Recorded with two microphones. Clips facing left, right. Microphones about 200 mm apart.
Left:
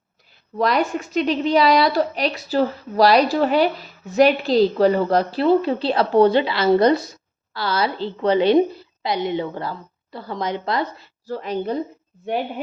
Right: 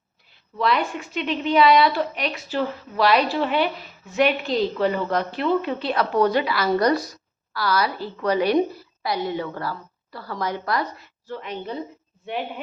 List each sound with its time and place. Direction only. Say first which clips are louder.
0.5 s a woman's voice: left 3 dB; 40° left (ahead or behind)